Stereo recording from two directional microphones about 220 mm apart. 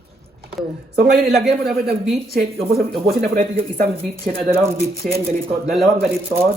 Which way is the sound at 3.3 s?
40° right (ahead or behind).